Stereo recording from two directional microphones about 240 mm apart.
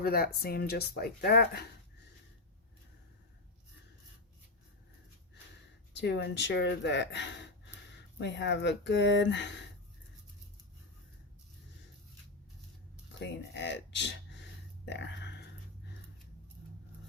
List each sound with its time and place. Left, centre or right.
0.0 s speech: left
5.9 s speech: left
13.1 s speech: left
14.8 s a sound: left